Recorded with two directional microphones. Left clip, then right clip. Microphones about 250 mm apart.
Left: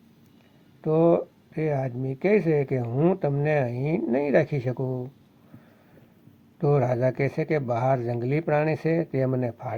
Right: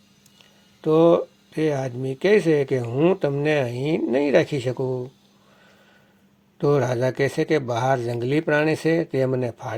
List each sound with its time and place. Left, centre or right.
0.8 s speech: right
6.6 s speech: right